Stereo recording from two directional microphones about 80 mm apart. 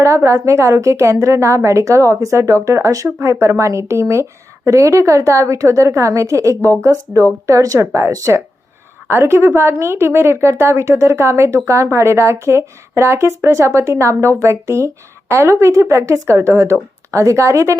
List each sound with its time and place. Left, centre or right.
0.0 s a woman's voice: right